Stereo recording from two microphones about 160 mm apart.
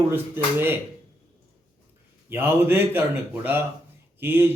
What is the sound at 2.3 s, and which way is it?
Speech, 15° right (ahead or behind).